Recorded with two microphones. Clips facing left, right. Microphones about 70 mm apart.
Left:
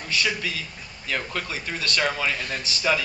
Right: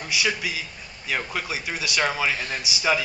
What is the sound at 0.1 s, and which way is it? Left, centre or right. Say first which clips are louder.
Speech: even; centre.